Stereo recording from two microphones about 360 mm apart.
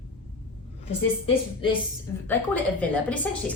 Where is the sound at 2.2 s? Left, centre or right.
Centre.